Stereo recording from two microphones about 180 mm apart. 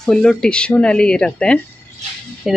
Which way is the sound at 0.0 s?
Centre (ahead or behind).